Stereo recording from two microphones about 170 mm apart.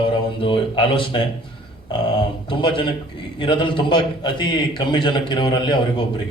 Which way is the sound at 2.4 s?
30° left (ahead or behind).